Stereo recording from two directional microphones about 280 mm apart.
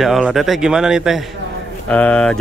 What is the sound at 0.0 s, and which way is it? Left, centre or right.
Speech, centre.